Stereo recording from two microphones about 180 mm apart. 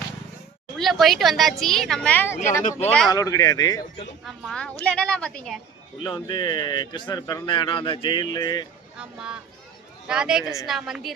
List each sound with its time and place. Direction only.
0.8 s a woman's voice: centre (ahead or behind)
3.1 s speech: 20° left (ahead or behind)
4.3 s a woman's voice: 5° left (ahead or behind)
6.0 s speech: 25° left (ahead or behind)
9.0 s a woman's voice: 5° right (ahead or behind)